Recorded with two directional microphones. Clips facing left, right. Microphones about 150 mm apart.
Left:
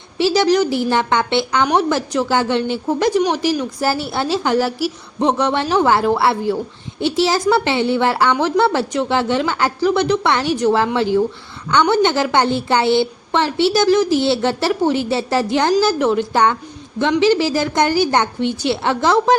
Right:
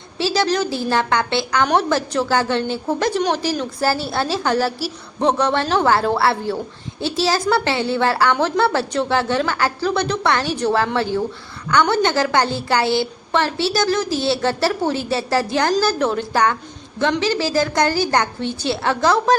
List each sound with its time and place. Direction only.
0.2 s a woman's voice: 20° left (ahead or behind)